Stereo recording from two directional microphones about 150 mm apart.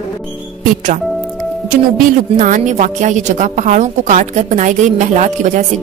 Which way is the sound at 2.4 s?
55° right (ahead or behind).